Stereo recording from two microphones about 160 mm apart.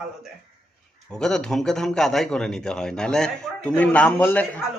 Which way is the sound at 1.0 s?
5° left (ahead or behind).